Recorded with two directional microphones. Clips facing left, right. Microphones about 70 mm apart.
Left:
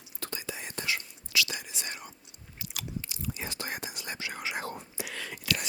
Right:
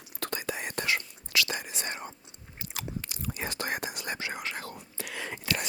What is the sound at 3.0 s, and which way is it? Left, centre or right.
Whispering, right.